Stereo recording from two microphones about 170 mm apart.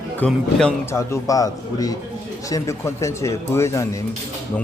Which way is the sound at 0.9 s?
20° left (ahead or behind).